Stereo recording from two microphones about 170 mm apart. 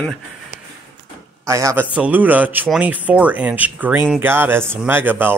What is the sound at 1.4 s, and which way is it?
Speech, 15° right (ahead or behind).